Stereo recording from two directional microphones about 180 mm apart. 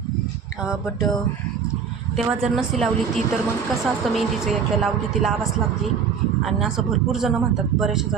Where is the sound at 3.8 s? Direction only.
Centre (ahead or behind).